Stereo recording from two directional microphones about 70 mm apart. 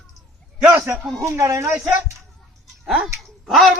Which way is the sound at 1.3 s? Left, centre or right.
Right.